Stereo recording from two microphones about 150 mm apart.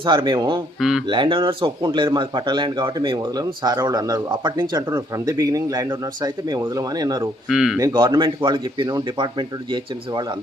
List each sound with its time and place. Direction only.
0.0 s speech: 30° right (ahead or behind)
0.8 s a man's voice: 5° right (ahead or behind)
1.0 s speech: 30° right (ahead or behind)
7.5 s a man's voice: 5° right (ahead or behind)
7.8 s speech: 25° right (ahead or behind)